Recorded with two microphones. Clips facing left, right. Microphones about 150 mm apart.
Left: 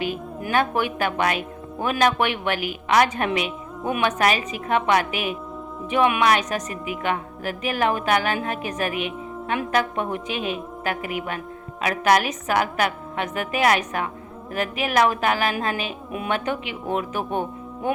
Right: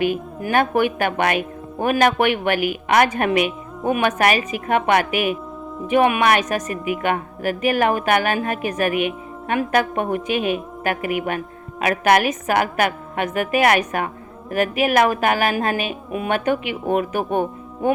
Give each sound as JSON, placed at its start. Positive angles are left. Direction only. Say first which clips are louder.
{"t": 0.0, "sound": "a woman's voice", "louder": "right 6 dB", "side_deg": -55}